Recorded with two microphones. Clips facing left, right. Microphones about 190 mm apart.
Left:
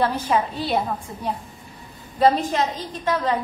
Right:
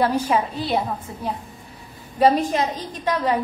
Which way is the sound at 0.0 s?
10° right (ahead or behind).